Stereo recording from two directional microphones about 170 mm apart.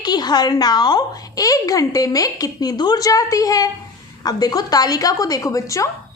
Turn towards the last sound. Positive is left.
turn(degrees=20)  # may be behind; listen again after turning